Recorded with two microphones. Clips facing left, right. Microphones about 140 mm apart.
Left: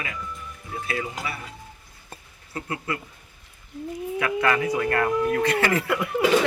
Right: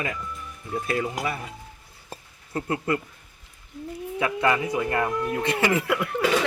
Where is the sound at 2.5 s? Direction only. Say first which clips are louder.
Right 5 dB; 35° right (ahead or behind).